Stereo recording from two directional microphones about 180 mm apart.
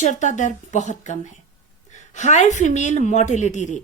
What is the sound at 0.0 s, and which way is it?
A woman's voice, 45° left (ahead or behind).